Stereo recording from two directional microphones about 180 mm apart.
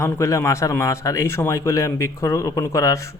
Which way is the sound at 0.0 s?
15° left (ahead or behind).